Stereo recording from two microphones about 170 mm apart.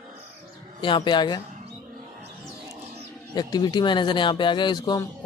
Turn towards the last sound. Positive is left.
turn(degrees=25)  # may be behind; listen again after turning